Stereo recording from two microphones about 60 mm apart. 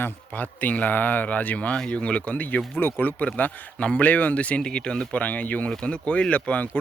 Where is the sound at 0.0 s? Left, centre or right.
Left.